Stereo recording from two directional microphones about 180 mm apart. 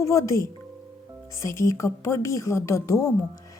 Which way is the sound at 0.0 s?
15° left (ahead or behind).